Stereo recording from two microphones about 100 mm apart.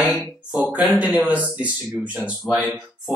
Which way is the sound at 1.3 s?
15° right (ahead or behind).